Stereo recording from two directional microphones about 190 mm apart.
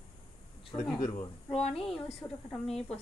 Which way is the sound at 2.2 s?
5° left (ahead or behind).